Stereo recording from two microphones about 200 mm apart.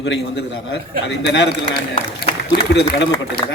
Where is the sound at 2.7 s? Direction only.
60° left (ahead or behind).